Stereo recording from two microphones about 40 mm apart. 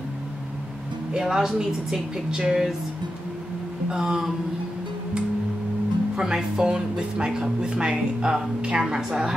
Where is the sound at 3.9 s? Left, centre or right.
Centre.